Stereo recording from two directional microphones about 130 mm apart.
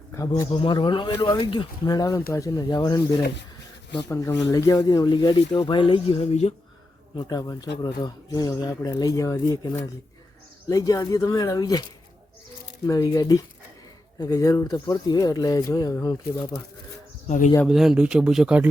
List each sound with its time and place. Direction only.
0.5 s speech: 40° left (ahead or behind)
4.1 s speech: 25° left (ahead or behind); by 6.5 s 50° left (ahead or behind)
7.2 s speech: 30° left (ahead or behind)
12.8 s speech: 30° left (ahead or behind)
17.2 s speech: 65° left (ahead or behind)
17.7 s speech: 5° right (ahead or behind)